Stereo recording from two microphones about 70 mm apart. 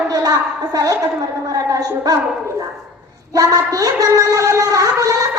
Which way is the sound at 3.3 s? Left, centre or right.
Right.